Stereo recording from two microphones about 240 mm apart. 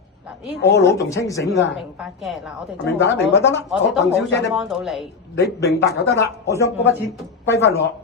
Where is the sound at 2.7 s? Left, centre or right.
Left.